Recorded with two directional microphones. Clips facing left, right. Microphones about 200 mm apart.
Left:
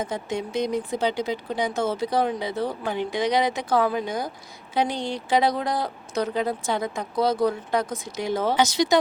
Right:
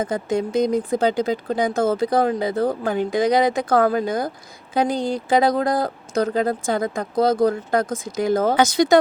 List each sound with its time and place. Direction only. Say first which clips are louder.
0.0 s speech: right 6 dB; 50° right (ahead or behind)